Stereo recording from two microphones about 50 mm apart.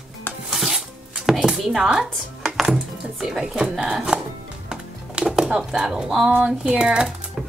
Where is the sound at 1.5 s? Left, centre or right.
Centre.